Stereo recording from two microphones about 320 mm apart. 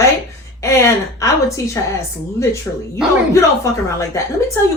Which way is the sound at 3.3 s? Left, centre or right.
Centre.